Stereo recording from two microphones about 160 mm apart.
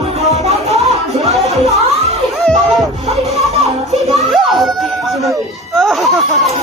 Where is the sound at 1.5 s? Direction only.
Centre (ahead or behind).